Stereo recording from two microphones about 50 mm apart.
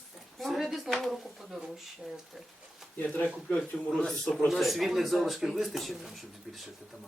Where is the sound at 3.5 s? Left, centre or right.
Centre.